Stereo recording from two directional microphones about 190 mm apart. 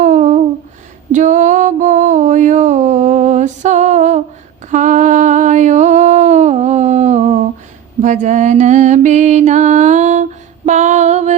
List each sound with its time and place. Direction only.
0.0 s a sound: 40° right (ahead or behind)
8.0 s mantra: 40° right (ahead or behind)
10.7 s female singing: 40° right (ahead or behind)